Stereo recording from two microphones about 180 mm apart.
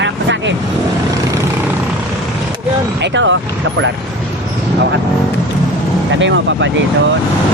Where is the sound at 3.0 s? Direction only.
90° right.